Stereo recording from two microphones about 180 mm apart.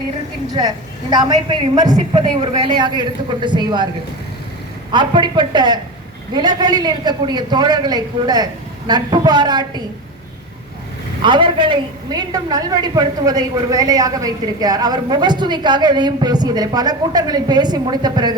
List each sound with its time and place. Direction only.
1.1 s a woman's voice: 25° right (ahead or behind)
4.9 s a woman's voice: 25° right (ahead or behind)
11.2 s a woman's voice: 25° right (ahead or behind)